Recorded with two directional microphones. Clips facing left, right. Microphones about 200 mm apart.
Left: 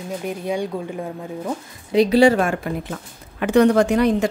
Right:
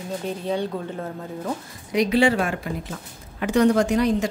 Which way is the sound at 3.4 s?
60° left (ahead or behind).